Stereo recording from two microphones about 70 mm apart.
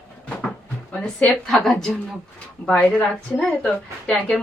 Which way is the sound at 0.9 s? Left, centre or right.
Centre.